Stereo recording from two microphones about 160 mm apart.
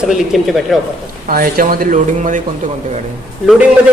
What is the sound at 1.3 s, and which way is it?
Speech, 65° right (ahead or behind).